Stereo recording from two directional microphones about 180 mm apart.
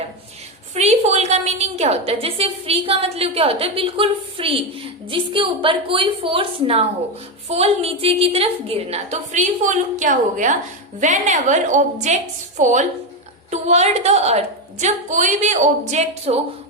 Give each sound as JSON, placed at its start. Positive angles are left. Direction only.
{"t": 0.7, "sound": "a woman's voice", "side_deg": -35}